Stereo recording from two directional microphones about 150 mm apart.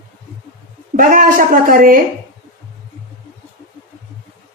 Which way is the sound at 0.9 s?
65° right (ahead or behind).